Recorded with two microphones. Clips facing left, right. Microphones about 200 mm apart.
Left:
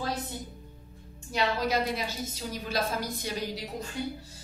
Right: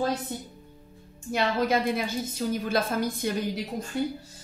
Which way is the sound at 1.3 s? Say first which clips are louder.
Right 3 dB; 50° right (ahead or behind).